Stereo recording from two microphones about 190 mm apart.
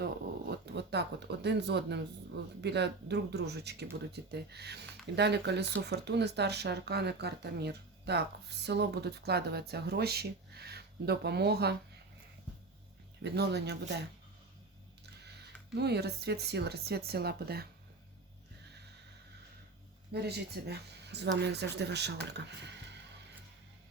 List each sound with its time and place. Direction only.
0.6 s speech: 60° right (ahead or behind)
13.2 s speech: 60° right (ahead or behind)
15.7 s speech: 60° right (ahead or behind)
20.1 s speech: 60° right (ahead or behind)